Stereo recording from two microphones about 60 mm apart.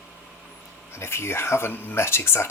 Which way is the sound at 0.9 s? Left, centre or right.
Left.